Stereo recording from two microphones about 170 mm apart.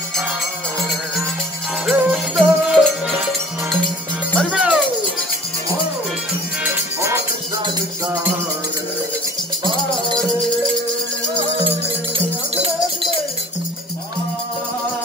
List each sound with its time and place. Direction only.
1.9 s music: centre (ahead or behind)
4.5 s music: 5° right (ahead or behind)
6.6 s music: 15° right (ahead or behind)